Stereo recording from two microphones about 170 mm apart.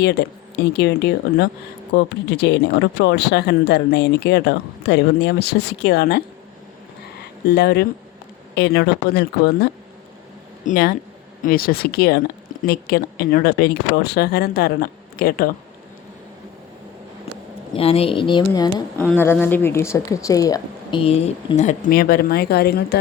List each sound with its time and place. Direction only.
0.0 s a woman's voice: 75° left (ahead or behind)
7.4 s speech: 75° left (ahead or behind)
10.7 s speech: 60° left (ahead or behind)
17.7 s a woman's voice: 35° left (ahead or behind)
18.9 s a woman's voice: 10° left (ahead or behind)
21.0 s a woman's voice: 40° left (ahead or behind)
21.9 s speech: 65° left (ahead or behind)